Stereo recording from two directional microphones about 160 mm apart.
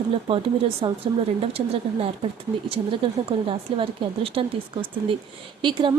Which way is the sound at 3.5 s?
35° right (ahead or behind).